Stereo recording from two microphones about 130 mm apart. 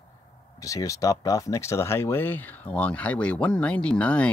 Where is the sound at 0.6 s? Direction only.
25° left (ahead or behind).